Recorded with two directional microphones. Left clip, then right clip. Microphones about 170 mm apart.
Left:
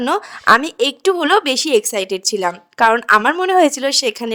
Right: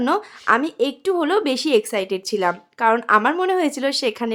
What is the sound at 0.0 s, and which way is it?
Speech, 35° left (ahead or behind).